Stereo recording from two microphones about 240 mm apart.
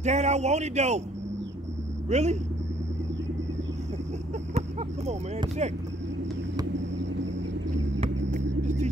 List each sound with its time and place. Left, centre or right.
0.0 s speech: right
2.0 s speech: right
4.6 s a sound: right
8.0 s rumble: right